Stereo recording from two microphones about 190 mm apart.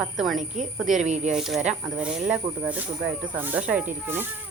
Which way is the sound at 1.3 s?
5° right (ahead or behind).